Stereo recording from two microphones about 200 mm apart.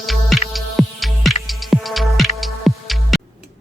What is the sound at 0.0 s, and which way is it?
Music, centre (ahead or behind).